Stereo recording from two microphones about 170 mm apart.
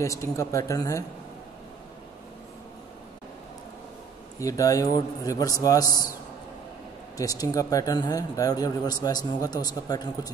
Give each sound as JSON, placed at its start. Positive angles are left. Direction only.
{"t": 0.0, "sound": "speech", "side_deg": 20}
{"t": 4.4, "sound": "speech", "side_deg": 20}
{"t": 7.2, "sound": "speech", "side_deg": 20}